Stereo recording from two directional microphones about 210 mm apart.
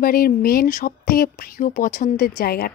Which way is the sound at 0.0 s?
45° left (ahead or behind).